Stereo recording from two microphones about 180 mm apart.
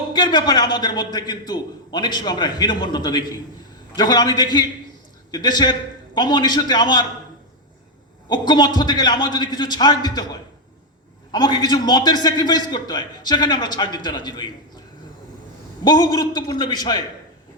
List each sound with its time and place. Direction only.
0.1 s a man's voice: 25° left (ahead or behind)
8.3 s a man's voice: 25° left (ahead or behind)
15.8 s a man's voice: 25° left (ahead or behind)